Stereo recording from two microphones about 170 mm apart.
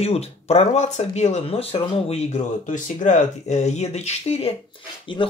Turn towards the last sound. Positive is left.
turn(degrees=30)  # may be behind; listen again after turning